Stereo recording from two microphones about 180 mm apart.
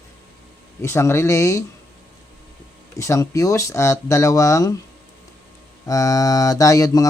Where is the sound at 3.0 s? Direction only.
20° left (ahead or behind).